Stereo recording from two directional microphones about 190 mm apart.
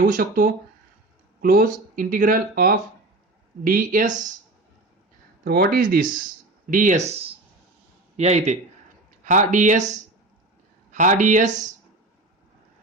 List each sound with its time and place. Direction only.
0.0 s speech: 45° right (ahead or behind)
5.5 s a man's voice: 50° right (ahead or behind)
10.9 s speech: 40° right (ahead or behind)